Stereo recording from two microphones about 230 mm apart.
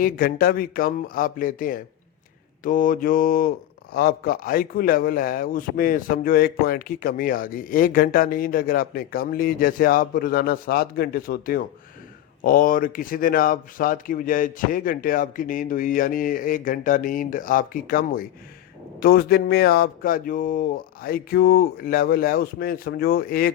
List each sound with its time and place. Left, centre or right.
0.0 s a man's voice: left